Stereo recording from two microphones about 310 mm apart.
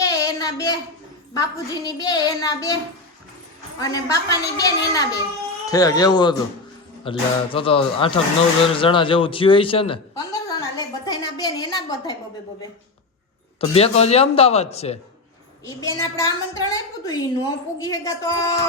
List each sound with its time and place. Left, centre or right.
0.0 s a sound: centre
1.3 s a woman's voice: centre
3.8 s a woman's voice: centre
13.6 s a woman's voice: centre